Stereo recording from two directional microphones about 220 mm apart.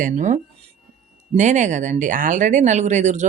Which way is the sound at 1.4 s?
35° right (ahead or behind).